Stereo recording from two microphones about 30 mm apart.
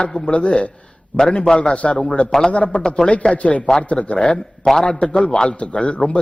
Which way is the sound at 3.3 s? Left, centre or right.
Left.